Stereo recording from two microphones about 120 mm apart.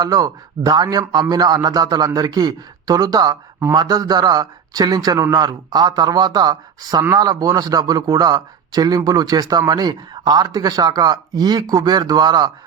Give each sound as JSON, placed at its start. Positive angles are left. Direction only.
{"t": 0.0, "sound": "a man's voice", "side_deg": -30}